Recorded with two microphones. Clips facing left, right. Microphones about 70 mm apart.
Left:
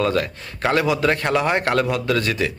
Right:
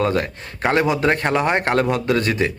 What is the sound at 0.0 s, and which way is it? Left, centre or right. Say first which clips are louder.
A man's voice: right 1 dB; right.